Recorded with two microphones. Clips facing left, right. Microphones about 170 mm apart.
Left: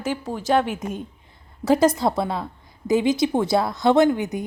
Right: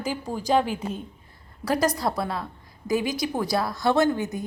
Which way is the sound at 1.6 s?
25° left (ahead or behind).